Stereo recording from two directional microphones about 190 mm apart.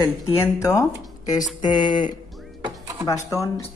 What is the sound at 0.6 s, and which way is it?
Speech, 20° left (ahead or behind).